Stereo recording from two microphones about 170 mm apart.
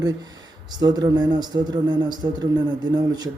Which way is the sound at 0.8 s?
25° right (ahead or behind).